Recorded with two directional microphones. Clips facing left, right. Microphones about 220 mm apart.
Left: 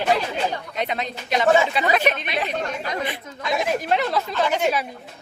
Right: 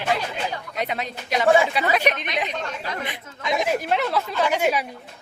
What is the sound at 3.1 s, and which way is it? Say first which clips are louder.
Speech: left 1 dB; 15° right (ahead or behind).